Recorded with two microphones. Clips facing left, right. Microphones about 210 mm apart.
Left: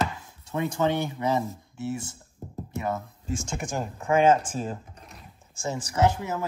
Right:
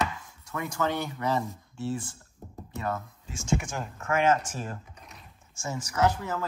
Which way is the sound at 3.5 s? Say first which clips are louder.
Even; 40° left (ahead or behind).